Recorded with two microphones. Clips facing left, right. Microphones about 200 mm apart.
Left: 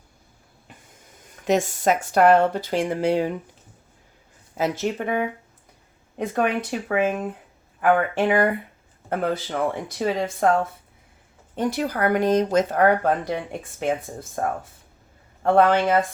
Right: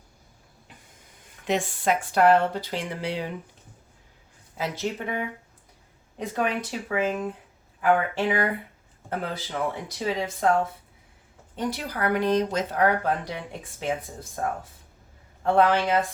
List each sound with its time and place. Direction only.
1.5 s speech: 45° left (ahead or behind)
4.5 s speech: 45° left (ahead or behind)
11.5 s speech: 50° left (ahead or behind)